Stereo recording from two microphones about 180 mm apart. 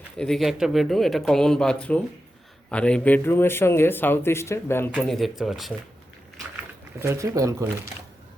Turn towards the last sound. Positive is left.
turn(degrees=-15)  # may be behind; listen again after turning